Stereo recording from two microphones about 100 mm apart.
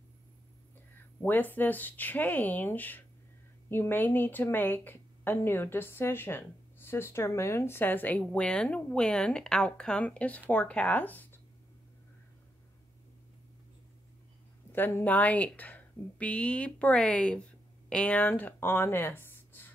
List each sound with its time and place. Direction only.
1.2 s a woman's voice: 20° left (ahead or behind)
14.7 s speech: 20° left (ahead or behind)